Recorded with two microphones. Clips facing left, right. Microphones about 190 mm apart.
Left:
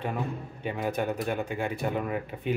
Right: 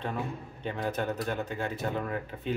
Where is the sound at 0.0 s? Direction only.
10° left (ahead or behind).